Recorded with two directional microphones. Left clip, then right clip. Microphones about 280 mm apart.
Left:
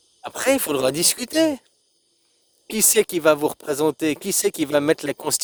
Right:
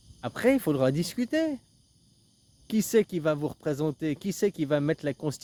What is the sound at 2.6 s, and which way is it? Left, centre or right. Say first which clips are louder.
Speech: left 5 dB; left.